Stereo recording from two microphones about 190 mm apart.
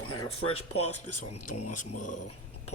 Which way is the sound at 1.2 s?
40° left (ahead or behind).